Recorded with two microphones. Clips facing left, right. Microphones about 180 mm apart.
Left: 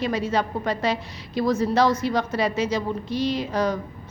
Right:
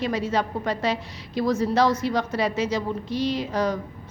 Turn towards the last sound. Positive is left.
turn(degrees=60)  # may be behind; listen again after turning